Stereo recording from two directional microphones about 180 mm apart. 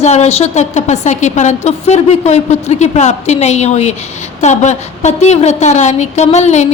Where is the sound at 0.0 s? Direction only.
35° left (ahead or behind).